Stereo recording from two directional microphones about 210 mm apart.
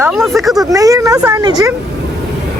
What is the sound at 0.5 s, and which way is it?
Speech, 15° right (ahead or behind).